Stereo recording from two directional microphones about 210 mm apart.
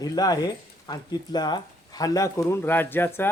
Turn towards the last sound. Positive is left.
turn(degrees=10)  # may be behind; listen again after turning